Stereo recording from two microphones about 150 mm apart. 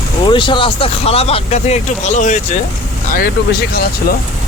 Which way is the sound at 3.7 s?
90° left.